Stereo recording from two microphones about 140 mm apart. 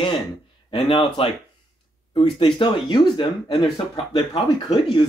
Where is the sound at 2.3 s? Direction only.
35° left (ahead or behind).